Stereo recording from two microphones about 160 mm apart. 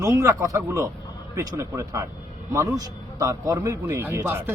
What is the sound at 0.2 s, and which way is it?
A man's voice, 20° right (ahead or behind).